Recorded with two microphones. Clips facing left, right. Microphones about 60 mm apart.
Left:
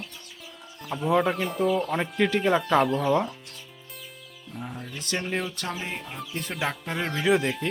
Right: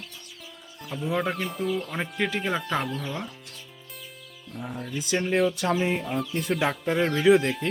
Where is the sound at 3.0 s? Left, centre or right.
Centre.